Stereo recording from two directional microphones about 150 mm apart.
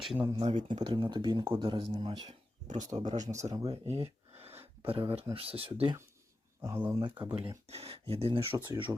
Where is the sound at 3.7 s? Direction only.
40° right (ahead or behind).